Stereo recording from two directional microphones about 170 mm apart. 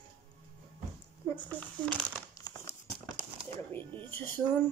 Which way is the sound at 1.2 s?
10° left (ahead or behind).